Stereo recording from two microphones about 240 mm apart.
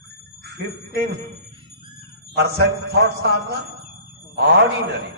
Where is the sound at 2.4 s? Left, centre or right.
Right.